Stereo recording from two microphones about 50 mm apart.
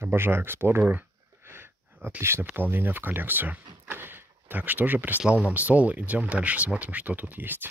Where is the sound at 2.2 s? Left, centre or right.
Right.